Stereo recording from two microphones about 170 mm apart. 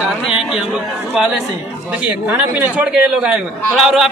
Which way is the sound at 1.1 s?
5° right (ahead or behind).